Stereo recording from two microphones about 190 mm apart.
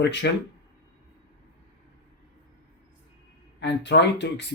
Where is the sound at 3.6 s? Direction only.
70° left (ahead or behind).